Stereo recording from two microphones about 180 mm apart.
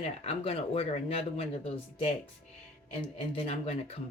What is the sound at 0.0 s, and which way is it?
A woman's voice, 35° left (ahead or behind).